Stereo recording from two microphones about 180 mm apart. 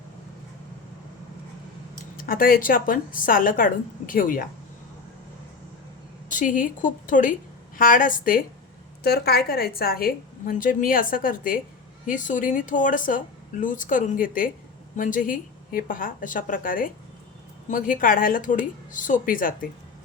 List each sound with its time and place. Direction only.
2.1 s a woman's voice: 55° left (ahead or behind)
6.3 s a woman's voice: 45° left (ahead or behind)
9.0 s a woman's voice: 65° left (ahead or behind)